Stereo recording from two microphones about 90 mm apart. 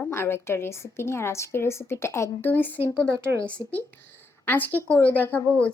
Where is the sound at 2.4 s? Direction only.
20° left (ahead or behind).